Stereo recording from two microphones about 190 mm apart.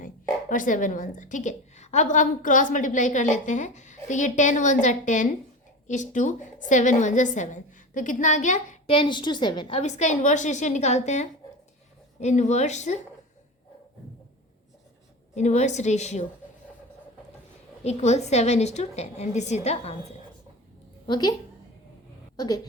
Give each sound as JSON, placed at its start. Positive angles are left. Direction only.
{"t": 0.0, "sound": "a woman's voice", "side_deg": 45}
{"t": 8.9, "sound": "a woman's voice", "side_deg": 25}
{"t": 15.4, "sound": "a woman's voice", "side_deg": 35}
{"t": 17.8, "sound": "a woman's voice", "side_deg": 35}
{"t": 21.1, "sound": "a woman's voice", "side_deg": 20}
{"t": 22.4, "sound": "a woman's voice", "side_deg": 20}